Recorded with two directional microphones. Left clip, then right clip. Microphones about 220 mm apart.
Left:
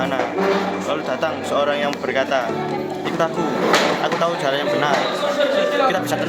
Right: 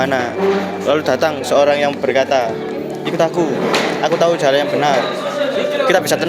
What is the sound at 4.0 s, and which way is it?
Speech, 25° right (ahead or behind).